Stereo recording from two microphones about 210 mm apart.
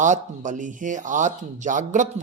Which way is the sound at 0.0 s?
35° right (ahead or behind).